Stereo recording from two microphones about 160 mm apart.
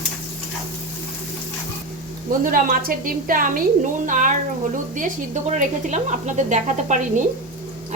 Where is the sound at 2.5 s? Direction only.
60° right (ahead or behind).